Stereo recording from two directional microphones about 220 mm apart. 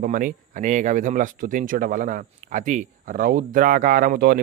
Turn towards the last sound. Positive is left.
turn(degrees=-40)  # may be behind; listen again after turning